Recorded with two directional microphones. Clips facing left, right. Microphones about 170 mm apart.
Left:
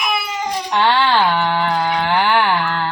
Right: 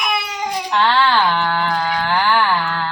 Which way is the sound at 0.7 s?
15° left (ahead or behind).